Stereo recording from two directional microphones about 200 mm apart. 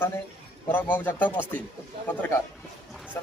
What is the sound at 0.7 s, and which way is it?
Speech, 10° left (ahead or behind).